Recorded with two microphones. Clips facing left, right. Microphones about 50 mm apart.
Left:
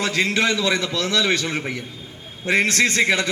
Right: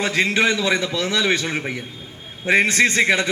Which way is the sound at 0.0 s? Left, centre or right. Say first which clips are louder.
Right 2 dB; centre.